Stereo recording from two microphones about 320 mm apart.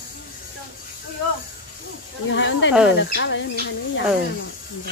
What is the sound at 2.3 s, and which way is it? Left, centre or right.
Speech, left.